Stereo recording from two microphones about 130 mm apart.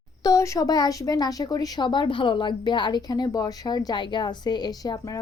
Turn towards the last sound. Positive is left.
turn(degrees=30)  # may be behind; listen again after turning